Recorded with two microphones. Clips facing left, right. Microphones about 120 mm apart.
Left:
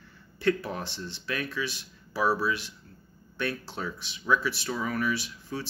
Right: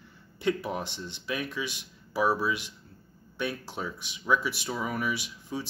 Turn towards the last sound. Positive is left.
turn(degrees=-15)  # may be behind; listen again after turning